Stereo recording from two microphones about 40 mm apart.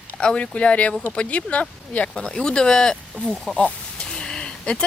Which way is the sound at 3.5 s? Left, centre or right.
Left.